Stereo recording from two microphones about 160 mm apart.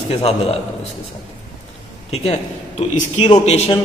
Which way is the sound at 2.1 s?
40° left (ahead or behind).